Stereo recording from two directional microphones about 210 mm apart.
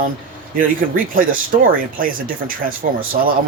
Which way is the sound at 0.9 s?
40° right (ahead or behind).